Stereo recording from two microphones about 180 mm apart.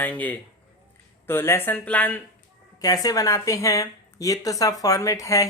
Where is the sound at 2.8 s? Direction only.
20° left (ahead or behind).